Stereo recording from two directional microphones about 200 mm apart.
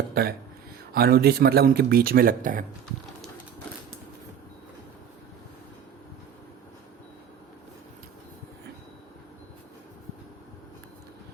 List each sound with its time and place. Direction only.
0.1 s a man's voice: 50° right (ahead or behind)